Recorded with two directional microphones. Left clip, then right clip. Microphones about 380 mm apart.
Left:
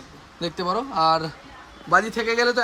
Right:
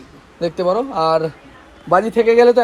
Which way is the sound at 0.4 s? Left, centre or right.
Centre.